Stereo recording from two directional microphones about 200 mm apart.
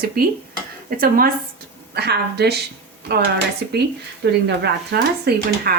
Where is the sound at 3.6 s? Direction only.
55° right (ahead or behind).